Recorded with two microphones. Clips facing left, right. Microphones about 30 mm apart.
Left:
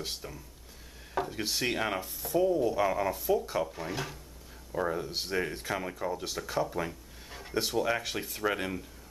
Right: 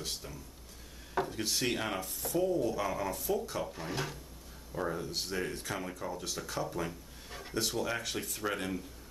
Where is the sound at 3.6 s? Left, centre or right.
Centre.